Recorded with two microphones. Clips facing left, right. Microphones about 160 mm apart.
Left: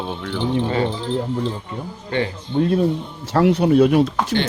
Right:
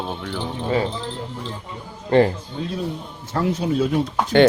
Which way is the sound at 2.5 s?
60° left (ahead or behind).